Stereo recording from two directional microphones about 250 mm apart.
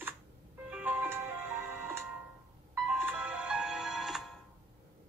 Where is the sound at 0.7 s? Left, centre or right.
Centre.